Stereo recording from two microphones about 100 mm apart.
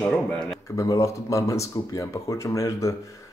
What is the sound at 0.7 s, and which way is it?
Speech, 35° left (ahead or behind).